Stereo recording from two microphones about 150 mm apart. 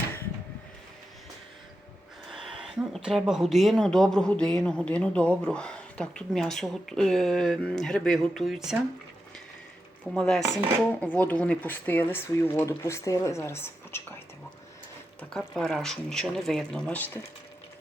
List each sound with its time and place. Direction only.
2.7 s speech: 5° right (ahead or behind)
10.2 s speech: 5° left (ahead or behind)
15.2 s speech: 5° left (ahead or behind)